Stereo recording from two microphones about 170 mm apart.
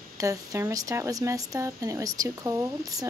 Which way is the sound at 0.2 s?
20° right (ahead or behind).